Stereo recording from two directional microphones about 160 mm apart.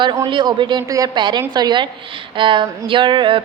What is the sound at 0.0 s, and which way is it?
A woman's voice, 25° right (ahead or behind).